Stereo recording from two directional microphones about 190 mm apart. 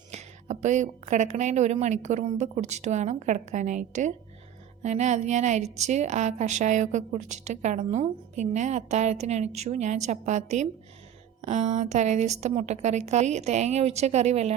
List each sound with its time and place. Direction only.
0.1 s a woman's voice: 35° right (ahead or behind)